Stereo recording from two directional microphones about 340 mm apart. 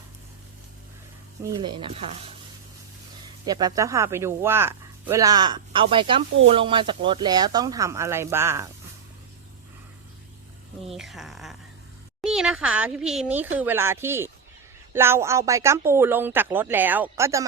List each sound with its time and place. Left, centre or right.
1.5 s speech: centre
3.4 s speech: centre
10.8 s speech: centre